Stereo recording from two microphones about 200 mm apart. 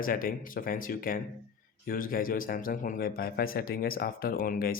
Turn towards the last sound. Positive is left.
turn(degrees=45)  # may be behind; listen again after turning